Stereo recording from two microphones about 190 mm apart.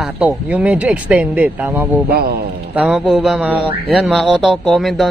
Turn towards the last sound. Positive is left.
turn(degrees=0)  # may be behind; listen again after turning